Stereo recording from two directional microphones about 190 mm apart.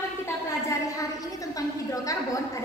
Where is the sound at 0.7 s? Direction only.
20° left (ahead or behind).